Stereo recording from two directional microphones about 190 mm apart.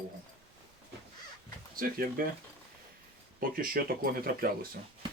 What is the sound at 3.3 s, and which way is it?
Speech, 50° right (ahead or behind).